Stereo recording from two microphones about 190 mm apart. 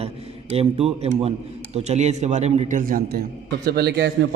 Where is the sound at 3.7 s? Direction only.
60° right (ahead or behind).